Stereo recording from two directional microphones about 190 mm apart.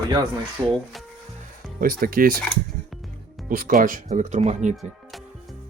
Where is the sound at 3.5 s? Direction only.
45° right (ahead or behind).